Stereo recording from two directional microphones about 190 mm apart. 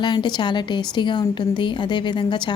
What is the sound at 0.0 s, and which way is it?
A woman's voice, 25° left (ahead or behind).